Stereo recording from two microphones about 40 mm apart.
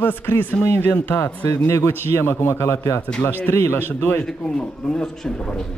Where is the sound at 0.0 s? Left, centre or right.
Left.